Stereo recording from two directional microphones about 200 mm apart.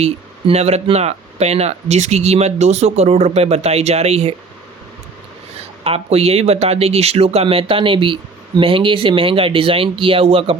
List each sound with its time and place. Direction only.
0.0 s speech: 30° right (ahead or behind)
5.8 s speech: 30° right (ahead or behind)